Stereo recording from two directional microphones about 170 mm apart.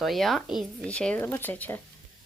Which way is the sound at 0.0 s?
Centre (ahead or behind).